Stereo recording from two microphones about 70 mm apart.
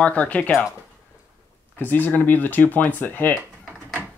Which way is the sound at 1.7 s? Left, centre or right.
Left.